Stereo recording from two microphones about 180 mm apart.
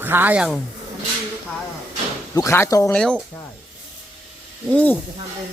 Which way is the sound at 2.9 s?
5° left (ahead or behind).